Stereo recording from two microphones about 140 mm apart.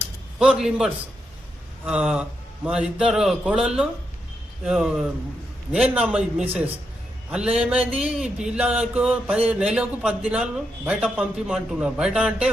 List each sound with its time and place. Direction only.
0.3 s a man's voice: 5° right (ahead or behind)
1.8 s mantra: 10° right (ahead or behind)
2.6 s a man's voice: 5° right (ahead or behind)
5.9 s mantra: 10° right (ahead or behind)